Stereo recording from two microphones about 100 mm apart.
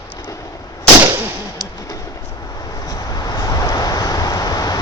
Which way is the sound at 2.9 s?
40° left (ahead or behind).